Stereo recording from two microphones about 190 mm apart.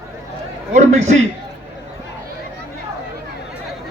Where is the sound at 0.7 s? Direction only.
35° right (ahead or behind).